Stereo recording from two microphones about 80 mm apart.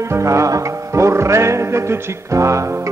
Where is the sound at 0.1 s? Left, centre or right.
Right.